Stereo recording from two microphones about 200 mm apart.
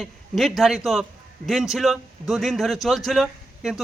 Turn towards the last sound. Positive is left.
turn(degrees=0)  # may be behind; listen again after turning